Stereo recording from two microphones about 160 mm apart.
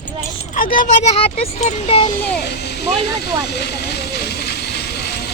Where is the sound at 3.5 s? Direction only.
90° left.